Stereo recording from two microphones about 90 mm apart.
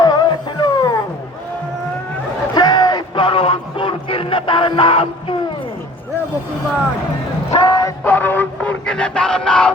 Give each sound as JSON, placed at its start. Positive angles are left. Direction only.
{"t": 0.0, "sound": "music", "side_deg": 50}
{"t": 2.6, "sound": "a sound", "side_deg": 50}
{"t": 3.2, "sound": "music", "side_deg": 90}
{"t": 7.5, "sound": "a sound", "side_deg": 45}
{"t": 8.0, "sound": "music", "side_deg": 25}
{"t": 8.9, "sound": "crowd", "side_deg": 10}